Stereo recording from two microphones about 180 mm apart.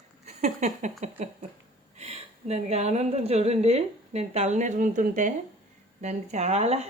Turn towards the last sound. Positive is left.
turn(degrees=-35)  # may be behind; listen again after turning